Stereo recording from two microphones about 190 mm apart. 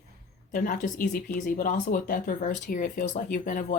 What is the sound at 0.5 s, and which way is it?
Speech, 45° left (ahead or behind).